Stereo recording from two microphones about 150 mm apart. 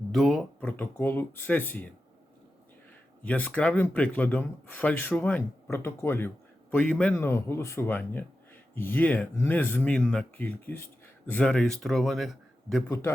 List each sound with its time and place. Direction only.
0.1 s speech: centre (ahead or behind)
0.7 s speech: 15° left (ahead or behind)
3.2 s speech: 10° left (ahead or behind)
12.9 s speech: 15° left (ahead or behind)